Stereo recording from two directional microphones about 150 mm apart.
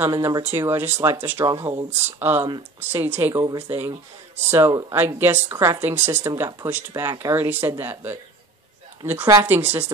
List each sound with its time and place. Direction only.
0.0 s speech: 20° right (ahead or behind)
4.5 s speech: 15° right (ahead or behind)